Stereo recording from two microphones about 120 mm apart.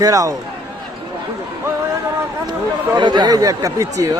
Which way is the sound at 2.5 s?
40° right (ahead or behind).